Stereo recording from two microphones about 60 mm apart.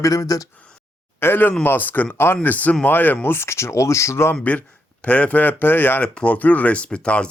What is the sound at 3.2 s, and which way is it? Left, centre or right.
Speech, left.